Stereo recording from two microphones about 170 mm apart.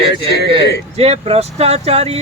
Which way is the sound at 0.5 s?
35° right (ahead or behind).